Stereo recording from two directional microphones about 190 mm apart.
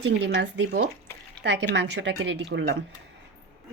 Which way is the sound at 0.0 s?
70° right (ahead or behind).